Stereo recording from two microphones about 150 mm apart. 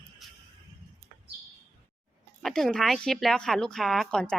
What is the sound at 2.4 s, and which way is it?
A woman's voice, 5° left (ahead or behind).